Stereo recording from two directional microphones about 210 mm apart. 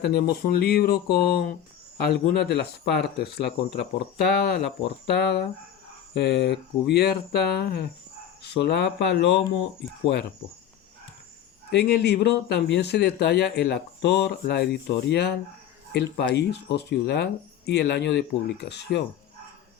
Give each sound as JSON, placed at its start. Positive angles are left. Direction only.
{"t": 0.0, "sound": "speech", "side_deg": 50}
{"t": 11.7, "sound": "speech", "side_deg": 50}